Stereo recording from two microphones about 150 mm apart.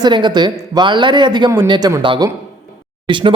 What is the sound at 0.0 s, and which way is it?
Speech, 30° right (ahead or behind).